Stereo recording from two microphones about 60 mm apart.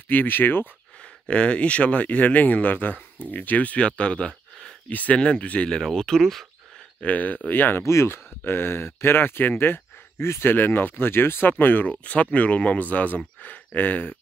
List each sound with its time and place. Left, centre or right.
0.1 s speech: left
1.2 s speech: centre
4.8 s speech: left; by 6.4 s centre
7.0 s speech: left
7.8 s speech: left